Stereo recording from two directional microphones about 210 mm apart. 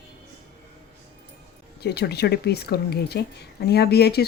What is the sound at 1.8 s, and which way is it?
A woman's voice, 50° left (ahead or behind).